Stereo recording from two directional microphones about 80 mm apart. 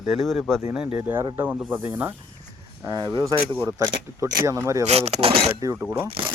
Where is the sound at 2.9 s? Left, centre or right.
Right.